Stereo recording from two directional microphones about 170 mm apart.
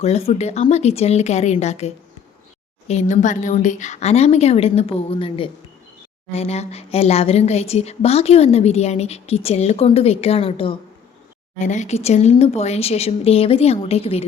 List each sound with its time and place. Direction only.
0.0 s a woman's voice: 35° left (ahead or behind)
11.6 s a woman's voice: 45° left (ahead or behind)